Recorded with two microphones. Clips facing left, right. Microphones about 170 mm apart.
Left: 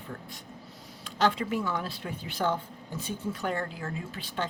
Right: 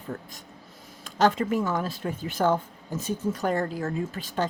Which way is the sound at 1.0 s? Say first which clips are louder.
Right 4 dB; 45° right (ahead or behind).